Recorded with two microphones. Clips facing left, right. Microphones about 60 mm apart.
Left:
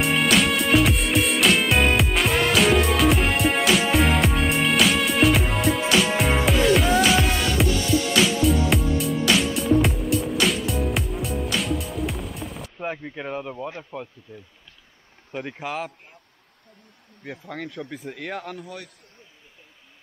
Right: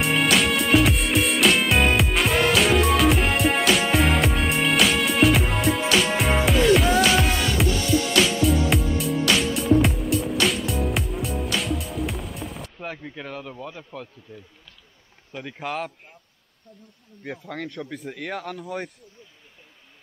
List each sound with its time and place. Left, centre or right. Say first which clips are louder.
0.0 s music: left 1 dB; centre
12.7 s speech: left 4 dB; centre
14.3 s speech: even; centre
15.6 s speech: right 5 dB; centre
17.2 s speech: right 1 dB; centre